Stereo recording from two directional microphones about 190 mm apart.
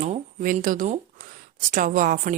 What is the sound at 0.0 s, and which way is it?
Speech, 40° right (ahead or behind).